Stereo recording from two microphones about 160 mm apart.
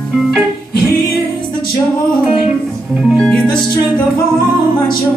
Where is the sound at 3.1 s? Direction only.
5° left (ahead or behind).